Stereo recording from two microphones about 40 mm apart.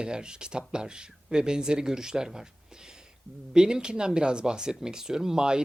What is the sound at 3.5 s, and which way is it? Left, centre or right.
Speech, centre.